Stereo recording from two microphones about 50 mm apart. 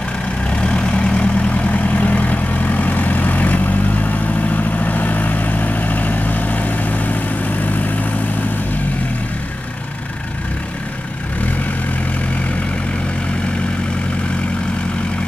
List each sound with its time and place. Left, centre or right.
0.6 s vehicle: left